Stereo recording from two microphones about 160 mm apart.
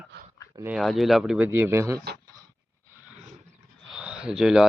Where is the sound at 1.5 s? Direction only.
15° right (ahead or behind).